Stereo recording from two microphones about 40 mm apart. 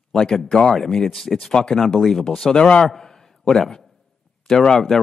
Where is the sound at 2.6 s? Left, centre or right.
Left.